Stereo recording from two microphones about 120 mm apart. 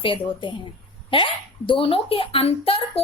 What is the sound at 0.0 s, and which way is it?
A woman's voice, 45° left (ahead or behind).